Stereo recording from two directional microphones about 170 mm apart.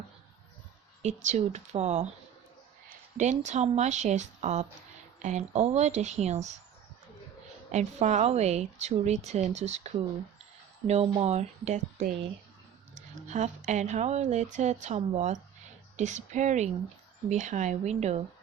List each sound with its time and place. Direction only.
1.0 s a woman's voice: 45° right (ahead or behind)
7.7 s a woman's voice: 40° right (ahead or behind)